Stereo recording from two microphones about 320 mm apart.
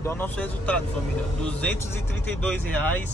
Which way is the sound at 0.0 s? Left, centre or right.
Centre.